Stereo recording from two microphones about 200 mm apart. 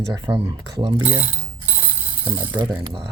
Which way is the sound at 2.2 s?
10° right (ahead or behind).